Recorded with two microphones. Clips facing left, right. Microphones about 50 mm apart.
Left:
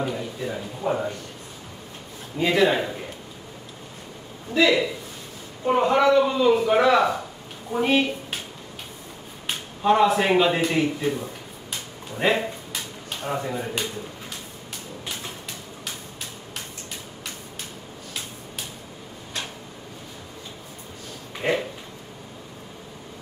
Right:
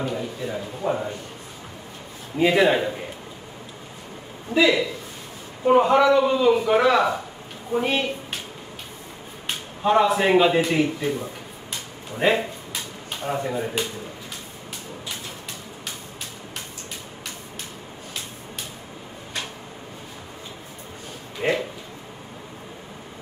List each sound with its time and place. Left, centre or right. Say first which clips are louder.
0.0 s a sound: even; centre
2.3 s a man's voice: right 2 dB; centre
5.7 s a man's voice: right 2 dB; centre
9.5 s speech: even; centre
21.4 s speech: right 1 dB; centre